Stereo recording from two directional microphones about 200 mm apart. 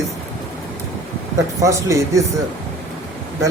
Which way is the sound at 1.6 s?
15° right (ahead or behind).